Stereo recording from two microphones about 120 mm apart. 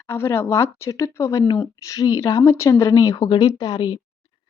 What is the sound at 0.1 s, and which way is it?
Speech, 20° left (ahead or behind).